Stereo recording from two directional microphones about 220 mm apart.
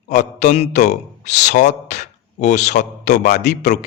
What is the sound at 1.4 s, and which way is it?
Speech, 50° left (ahead or behind).